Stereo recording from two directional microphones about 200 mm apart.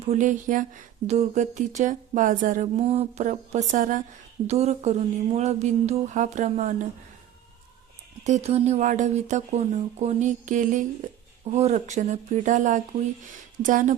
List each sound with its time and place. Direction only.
0.0 s speech: 35° right (ahead or behind)
8.2 s speech: 35° right (ahead or behind)